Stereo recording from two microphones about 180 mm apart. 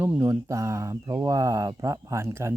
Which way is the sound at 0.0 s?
15° right (ahead or behind).